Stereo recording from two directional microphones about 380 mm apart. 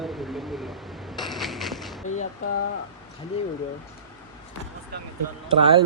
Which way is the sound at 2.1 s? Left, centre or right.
Left.